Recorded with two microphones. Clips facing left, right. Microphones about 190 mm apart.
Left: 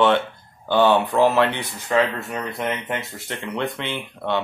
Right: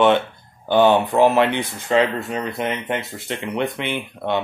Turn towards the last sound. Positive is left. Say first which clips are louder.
# right 2 dB
turn(degrees=-15)  # may be behind; listen again after turning